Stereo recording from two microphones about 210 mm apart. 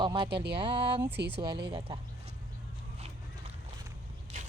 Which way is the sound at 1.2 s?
55° right (ahead or behind).